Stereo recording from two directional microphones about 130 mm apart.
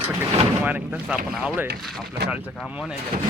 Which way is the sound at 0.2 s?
15° right (ahead or behind).